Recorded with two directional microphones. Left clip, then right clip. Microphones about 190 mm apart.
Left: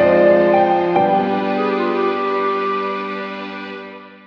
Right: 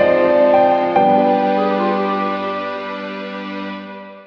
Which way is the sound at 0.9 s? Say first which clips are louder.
Right 3 dB; centre (ahead or behind).